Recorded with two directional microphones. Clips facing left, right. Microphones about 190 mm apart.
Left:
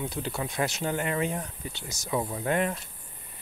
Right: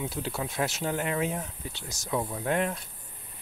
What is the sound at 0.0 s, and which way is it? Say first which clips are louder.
Speech: even; centre (ahead or behind).